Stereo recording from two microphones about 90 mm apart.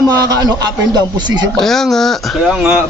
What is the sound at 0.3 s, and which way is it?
A man's voice, 50° right (ahead or behind).